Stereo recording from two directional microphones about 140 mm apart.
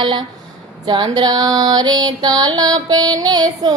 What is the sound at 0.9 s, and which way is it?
Music, 30° right (ahead or behind).